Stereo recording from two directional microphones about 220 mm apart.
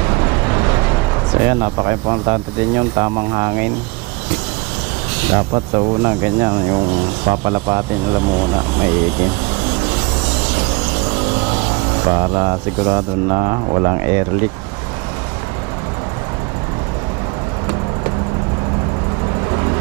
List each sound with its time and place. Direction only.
0.1 s vehicle: 15° right (ahead or behind)
1.4 s speech: 15° right (ahead or behind)
5.3 s speech: 25° right (ahead or behind)
12.1 s speech: 15° right (ahead or behind)